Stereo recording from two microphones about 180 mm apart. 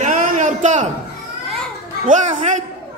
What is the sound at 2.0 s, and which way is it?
Speech, 45° right (ahead or behind).